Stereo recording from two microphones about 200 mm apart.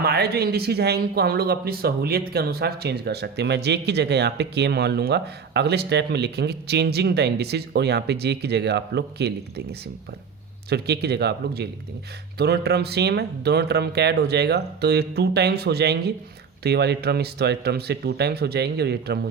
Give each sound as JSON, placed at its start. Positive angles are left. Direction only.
{"t": 0.0, "sound": "speech", "side_deg": -55}
{"t": 10.7, "sound": "speech", "side_deg": -55}